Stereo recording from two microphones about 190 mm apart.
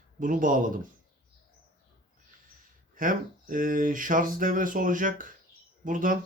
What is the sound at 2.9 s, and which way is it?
Speech, 45° right (ahead or behind).